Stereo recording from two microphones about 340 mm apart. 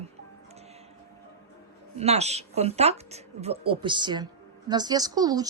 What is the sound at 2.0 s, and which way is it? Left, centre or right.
A woman's voice, centre.